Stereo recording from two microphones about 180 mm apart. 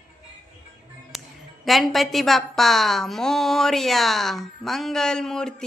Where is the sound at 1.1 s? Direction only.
Centre (ahead or behind).